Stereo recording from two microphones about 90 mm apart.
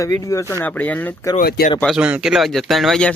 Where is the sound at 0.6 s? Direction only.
15° left (ahead or behind).